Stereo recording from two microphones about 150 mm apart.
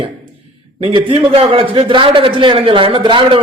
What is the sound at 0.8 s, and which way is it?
A man's voice, 35° right (ahead or behind).